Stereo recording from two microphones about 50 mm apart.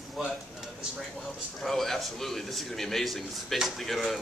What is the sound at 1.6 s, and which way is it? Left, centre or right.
Speech, centre.